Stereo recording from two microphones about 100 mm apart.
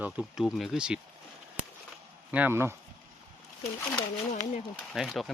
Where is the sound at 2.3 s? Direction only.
20° right (ahead or behind).